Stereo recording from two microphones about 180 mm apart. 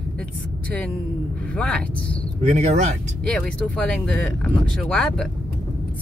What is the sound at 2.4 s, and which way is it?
Speech, 40° right (ahead or behind).